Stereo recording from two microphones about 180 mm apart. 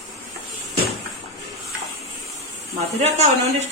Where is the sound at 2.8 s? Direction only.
40° right (ahead or behind).